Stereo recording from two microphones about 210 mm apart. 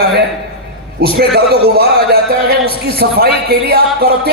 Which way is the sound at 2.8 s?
50° right (ahead or behind).